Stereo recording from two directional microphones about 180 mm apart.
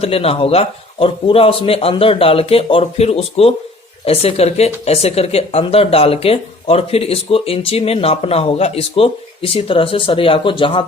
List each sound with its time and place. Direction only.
0.0 s speech: 35° left (ahead or behind)